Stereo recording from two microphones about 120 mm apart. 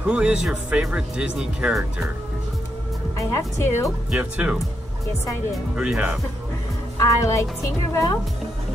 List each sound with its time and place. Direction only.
0.0 s speech: 10° right (ahead or behind)
3.2 s speech: 25° left (ahead or behind)
4.1 s speech: 10° right (ahead or behind)
7.0 s speech: 25° left (ahead or behind)